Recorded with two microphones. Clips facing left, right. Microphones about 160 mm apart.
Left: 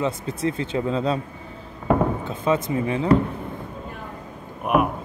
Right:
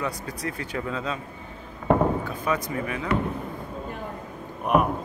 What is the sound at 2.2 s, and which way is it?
Speech, 25° left (ahead or behind).